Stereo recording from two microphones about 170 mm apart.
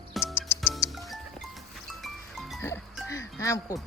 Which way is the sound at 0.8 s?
20° left (ahead or behind).